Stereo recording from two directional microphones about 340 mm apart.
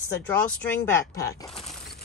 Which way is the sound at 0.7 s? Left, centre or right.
Centre.